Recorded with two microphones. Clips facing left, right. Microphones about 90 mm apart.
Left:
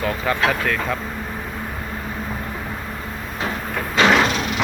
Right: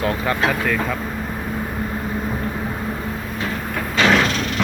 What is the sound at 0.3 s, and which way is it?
Speech, 5° right (ahead or behind).